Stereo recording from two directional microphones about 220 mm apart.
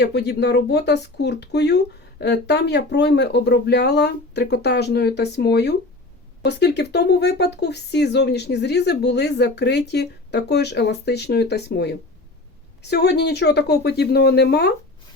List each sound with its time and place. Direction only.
0.0 s speech: 50° left (ahead or behind)